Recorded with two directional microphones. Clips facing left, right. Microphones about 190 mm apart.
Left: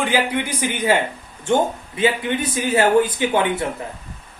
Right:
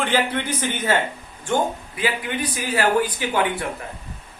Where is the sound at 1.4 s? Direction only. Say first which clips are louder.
Left 4 dB; 25° left (ahead or behind).